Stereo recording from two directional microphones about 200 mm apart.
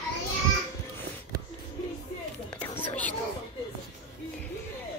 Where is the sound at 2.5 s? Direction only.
5° left (ahead or behind).